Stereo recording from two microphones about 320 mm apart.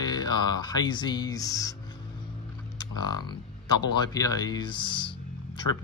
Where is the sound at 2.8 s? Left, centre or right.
Centre.